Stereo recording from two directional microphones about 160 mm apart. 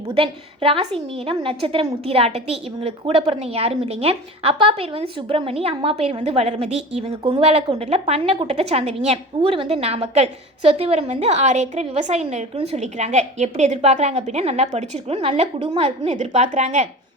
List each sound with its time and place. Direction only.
0.1 s a woman's voice: 35° right (ahead or behind)
7.1 s speech: 25° right (ahead or behind)
7.8 s a woman's voice: 40° right (ahead or behind)